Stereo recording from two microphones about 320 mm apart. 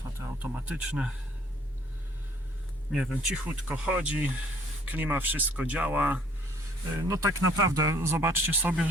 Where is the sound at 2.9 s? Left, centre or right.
Centre.